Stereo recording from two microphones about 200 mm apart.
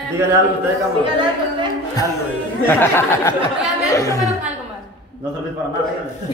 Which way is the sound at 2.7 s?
10° left (ahead or behind).